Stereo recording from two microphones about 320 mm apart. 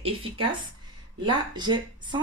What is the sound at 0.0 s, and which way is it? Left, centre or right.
Speech, centre.